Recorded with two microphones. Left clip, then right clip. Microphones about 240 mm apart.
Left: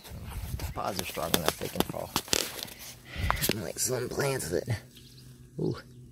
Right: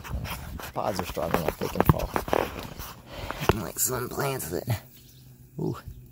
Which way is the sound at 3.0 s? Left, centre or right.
Right.